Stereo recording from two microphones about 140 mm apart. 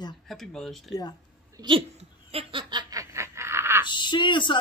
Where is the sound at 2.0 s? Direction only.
45° right (ahead or behind); by 3.8 s 15° right (ahead or behind).